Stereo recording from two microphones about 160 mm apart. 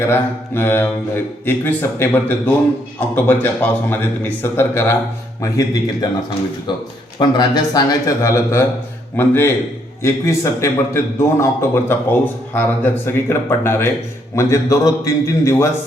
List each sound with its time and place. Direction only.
0.0 s a man's voice: 15° left (ahead or behind)